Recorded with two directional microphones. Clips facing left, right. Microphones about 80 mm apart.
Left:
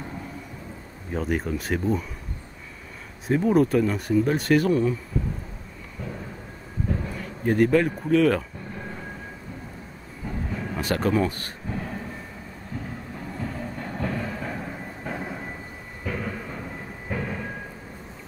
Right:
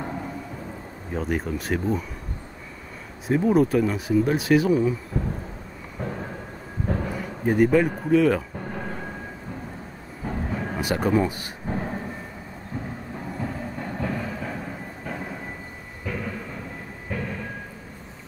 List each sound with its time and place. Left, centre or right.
1.1 s speech: centre
3.3 s speech: centre
6.9 s a sound: right
7.4 s speech: centre
8.5 s vehicle: right
10.2 s train: right
10.8 s speech: centre
11.7 s thunder: right
13.4 s train: centre
16.1 s a sound: centre